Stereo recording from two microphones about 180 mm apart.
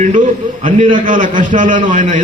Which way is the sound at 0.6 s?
45° right (ahead or behind).